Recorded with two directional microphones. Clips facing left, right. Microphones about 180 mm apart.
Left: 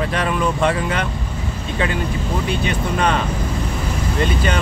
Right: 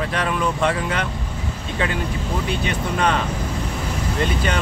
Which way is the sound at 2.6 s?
15° left (ahead or behind).